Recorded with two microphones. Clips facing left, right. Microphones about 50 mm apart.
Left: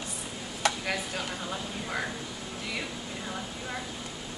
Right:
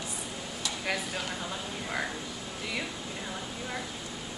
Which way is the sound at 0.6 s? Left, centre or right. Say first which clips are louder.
Left 10 dB; left.